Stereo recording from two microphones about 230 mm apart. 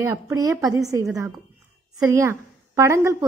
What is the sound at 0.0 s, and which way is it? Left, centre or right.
A woman's voice, centre.